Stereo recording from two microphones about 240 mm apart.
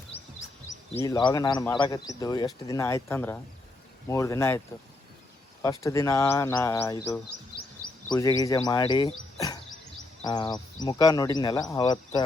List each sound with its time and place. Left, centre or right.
0.9 s a man's voice: centre
5.6 s a man's voice: centre